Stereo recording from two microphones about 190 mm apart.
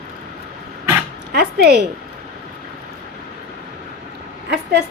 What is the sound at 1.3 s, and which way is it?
Speech, 60° right (ahead or behind).